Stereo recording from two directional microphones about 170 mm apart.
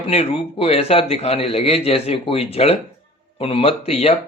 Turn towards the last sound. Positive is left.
turn(degrees=35)  # may be behind; listen again after turning